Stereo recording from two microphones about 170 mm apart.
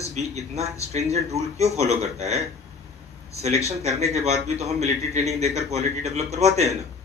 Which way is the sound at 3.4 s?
40° right (ahead or behind).